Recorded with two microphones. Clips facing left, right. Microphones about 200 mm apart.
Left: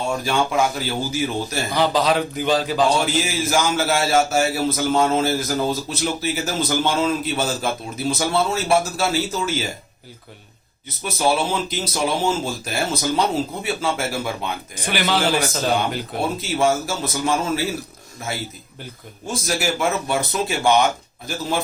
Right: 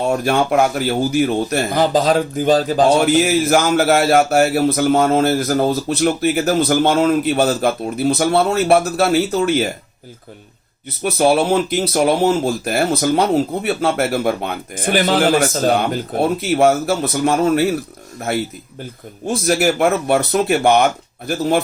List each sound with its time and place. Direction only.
0.1 s a man's voice: 60° right (ahead or behind)
11.0 s a man's voice: 55° right (ahead or behind)